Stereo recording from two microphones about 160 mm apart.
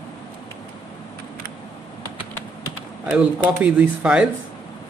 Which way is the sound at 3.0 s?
10° right (ahead or behind).